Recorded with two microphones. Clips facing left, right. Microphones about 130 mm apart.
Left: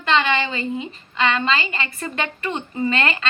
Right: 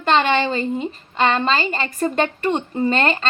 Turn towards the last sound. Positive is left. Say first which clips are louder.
# right 3 dB
turn(degrees=-35)  # may be behind; listen again after turning